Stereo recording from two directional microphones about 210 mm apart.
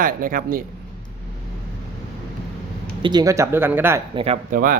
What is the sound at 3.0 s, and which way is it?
Speech, 20° right (ahead or behind).